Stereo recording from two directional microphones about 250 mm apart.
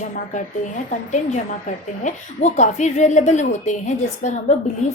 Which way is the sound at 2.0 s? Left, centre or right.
Left.